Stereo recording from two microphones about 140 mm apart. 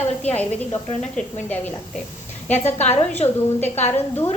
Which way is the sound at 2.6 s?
55° left (ahead or behind).